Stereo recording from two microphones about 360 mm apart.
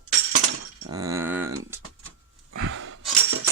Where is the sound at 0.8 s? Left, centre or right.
Centre.